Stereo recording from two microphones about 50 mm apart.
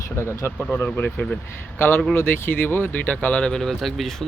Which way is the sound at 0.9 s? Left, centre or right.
Left.